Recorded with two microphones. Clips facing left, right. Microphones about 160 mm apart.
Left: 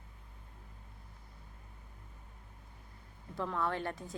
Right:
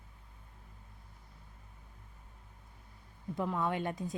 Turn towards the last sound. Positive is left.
turn(degrees=-15)  # may be behind; listen again after turning